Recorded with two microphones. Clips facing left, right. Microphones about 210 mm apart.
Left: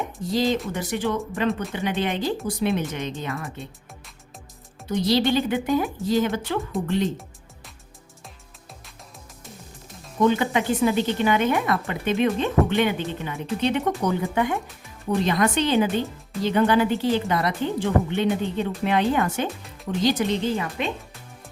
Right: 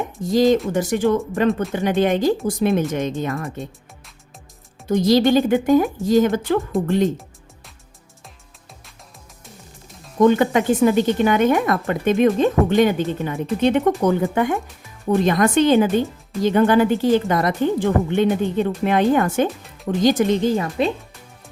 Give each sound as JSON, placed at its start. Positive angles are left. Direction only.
{"t": 0.2, "sound": "a woman's voice", "side_deg": -45}
{"t": 4.9, "sound": "a woman's voice", "side_deg": -45}
{"t": 10.2, "sound": "a woman's voice", "side_deg": -50}